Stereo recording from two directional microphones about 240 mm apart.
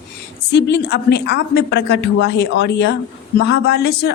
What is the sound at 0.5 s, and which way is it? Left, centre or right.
A woman's voice, left.